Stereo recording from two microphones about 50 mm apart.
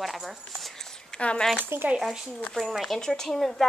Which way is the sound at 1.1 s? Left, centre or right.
Left.